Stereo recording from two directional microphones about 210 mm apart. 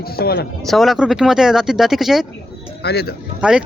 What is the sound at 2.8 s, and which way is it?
Speech, 50° left (ahead or behind).